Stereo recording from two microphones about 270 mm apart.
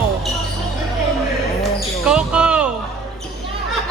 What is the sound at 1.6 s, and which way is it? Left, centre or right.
Basketball bounce, centre.